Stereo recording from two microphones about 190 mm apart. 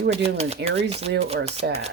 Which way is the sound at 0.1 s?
35° right (ahead or behind).